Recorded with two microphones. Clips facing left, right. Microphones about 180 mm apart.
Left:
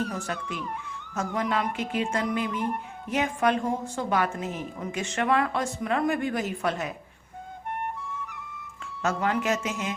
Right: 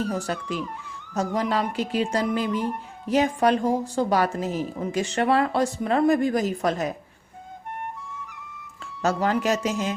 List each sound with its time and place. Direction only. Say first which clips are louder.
0.0 s a woman's voice: right 4 dB; 35° right (ahead or behind)
9.0 s a woman's voice: right 3 dB; 35° right (ahead or behind)